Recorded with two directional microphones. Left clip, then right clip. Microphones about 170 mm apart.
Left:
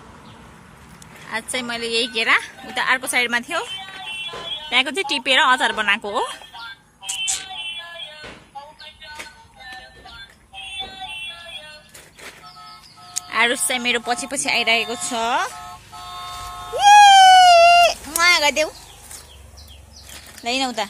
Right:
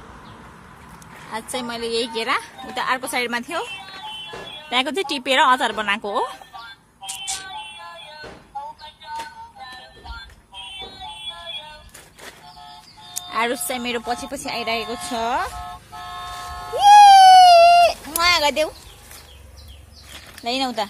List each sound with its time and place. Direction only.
1.3 s a woman's voice: 10° right (ahead or behind)
7.0 s music: 10° right (ahead or behind)
13.1 s music: 5° right (ahead or behind)
20.4 s a woman's voice: 5° right (ahead or behind)